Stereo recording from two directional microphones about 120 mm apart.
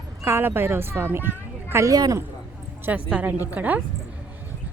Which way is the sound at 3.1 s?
15° right (ahead or behind).